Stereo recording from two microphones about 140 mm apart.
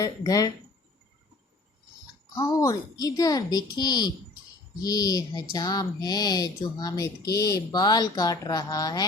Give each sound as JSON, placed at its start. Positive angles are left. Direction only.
{"t": 0.0, "sound": "speech", "side_deg": 25}
{"t": 2.3, "sound": "speech", "side_deg": 25}